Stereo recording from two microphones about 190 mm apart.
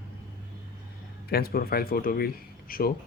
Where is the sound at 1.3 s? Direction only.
55° left (ahead or behind).